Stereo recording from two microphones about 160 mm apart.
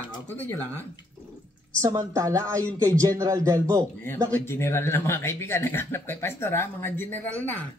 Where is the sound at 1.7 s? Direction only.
20° right (ahead or behind).